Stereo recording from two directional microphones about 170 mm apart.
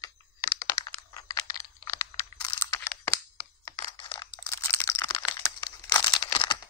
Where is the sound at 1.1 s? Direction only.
20° left (ahead or behind).